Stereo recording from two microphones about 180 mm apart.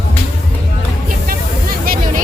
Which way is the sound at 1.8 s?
55° right (ahead or behind).